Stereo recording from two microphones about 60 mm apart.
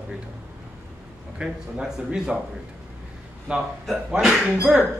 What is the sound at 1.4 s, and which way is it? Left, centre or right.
Speech, centre.